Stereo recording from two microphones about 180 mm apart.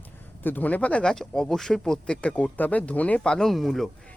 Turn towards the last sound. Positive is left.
turn(degrees=0)  # may be behind; listen again after turning